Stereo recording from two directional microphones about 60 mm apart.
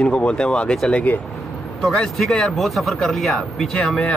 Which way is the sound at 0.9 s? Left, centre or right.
Left.